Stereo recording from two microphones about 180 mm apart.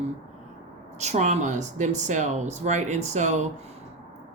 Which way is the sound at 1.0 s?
40° right (ahead or behind).